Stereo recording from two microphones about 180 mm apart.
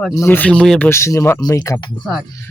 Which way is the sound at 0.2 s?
10° left (ahead or behind).